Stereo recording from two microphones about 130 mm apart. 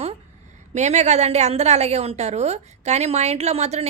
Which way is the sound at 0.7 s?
60° right (ahead or behind).